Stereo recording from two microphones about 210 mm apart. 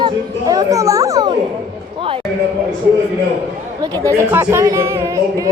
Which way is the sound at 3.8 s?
15° right (ahead or behind).